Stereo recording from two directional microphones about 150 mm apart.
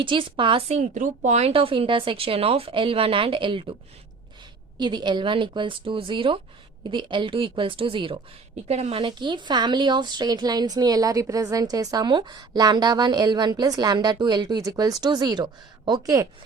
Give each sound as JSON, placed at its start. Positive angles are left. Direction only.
{"t": 0.0, "sound": "speech", "side_deg": -35}
{"t": 0.8, "sound": "speech", "side_deg": -55}
{"t": 4.8, "sound": "speech", "side_deg": -30}
{"t": 8.6, "sound": "a woman's voice", "side_deg": -45}